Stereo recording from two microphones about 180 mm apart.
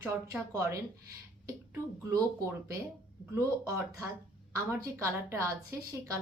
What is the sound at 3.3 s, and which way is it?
A woman's voice, 15° right (ahead or behind).